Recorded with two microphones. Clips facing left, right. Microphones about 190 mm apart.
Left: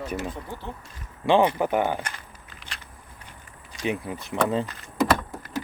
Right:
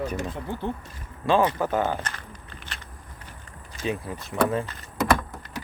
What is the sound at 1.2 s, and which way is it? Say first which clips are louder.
Speech: left 2 dB; 20° left (ahead or behind).